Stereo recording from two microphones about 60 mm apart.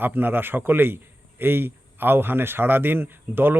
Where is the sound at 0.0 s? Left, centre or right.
Right.